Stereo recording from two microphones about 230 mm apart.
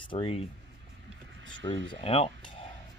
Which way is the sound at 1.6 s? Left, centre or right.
Centre.